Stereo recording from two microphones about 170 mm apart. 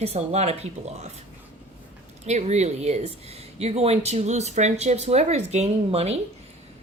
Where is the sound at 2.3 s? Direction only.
40° right (ahead or behind).